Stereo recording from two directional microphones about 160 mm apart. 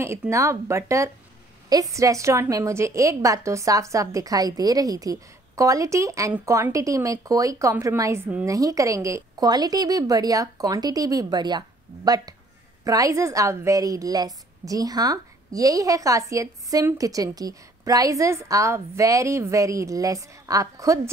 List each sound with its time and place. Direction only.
0.0 s a woman's voice: 15° right (ahead or behind)